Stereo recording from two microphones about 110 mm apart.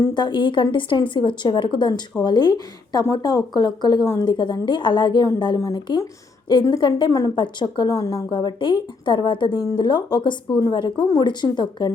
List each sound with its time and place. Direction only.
0.1 s a woman's voice: 45° left (ahead or behind)
8.3 s a woman's voice: 45° left (ahead or behind)